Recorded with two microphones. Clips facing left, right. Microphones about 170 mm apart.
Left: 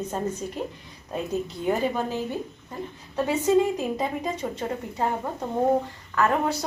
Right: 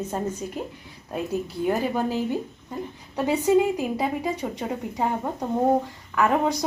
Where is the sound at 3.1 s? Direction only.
15° right (ahead or behind).